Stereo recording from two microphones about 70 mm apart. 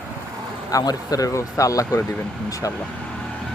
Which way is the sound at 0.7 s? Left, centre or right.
Left.